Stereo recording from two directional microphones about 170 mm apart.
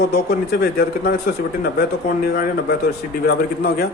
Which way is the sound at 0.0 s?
65° left (ahead or behind).